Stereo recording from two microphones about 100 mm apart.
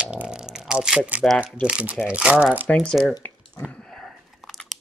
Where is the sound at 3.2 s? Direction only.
15° left (ahead or behind).